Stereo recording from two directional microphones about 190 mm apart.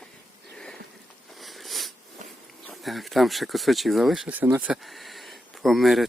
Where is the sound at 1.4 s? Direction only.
Centre (ahead or behind).